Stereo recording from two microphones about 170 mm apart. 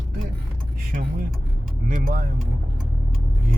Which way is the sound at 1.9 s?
50° right (ahead or behind).